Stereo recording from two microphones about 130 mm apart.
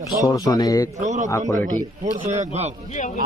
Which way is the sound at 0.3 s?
25° left (ahead or behind).